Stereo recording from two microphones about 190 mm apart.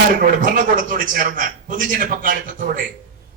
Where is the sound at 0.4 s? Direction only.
45° right (ahead or behind).